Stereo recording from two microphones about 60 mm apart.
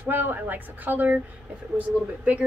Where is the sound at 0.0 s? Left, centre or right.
Right.